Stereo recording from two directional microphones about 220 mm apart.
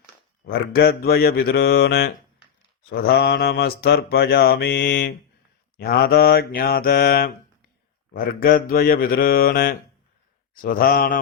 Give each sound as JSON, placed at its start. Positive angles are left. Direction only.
{"t": 0.6, "sound": "mantra", "side_deg": 45}